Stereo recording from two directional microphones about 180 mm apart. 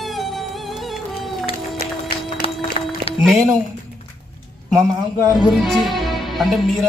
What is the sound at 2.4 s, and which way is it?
Music, 30° left (ahead or behind).